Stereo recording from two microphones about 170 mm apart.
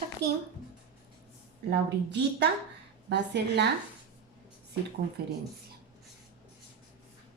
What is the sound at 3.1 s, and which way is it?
Speech, 90° right.